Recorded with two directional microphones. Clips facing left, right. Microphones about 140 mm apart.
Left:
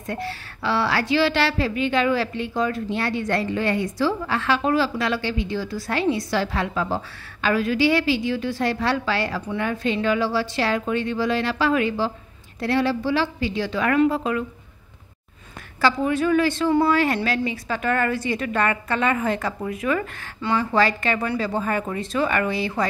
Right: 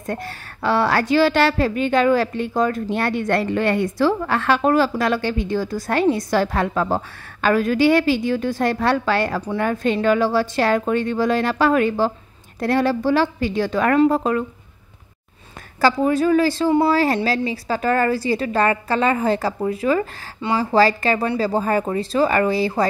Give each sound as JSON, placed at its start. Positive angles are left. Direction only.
{"t": 0.0, "sound": "a woman's voice", "side_deg": -45}
{"t": 15.8, "sound": "a woman's voice", "side_deg": -35}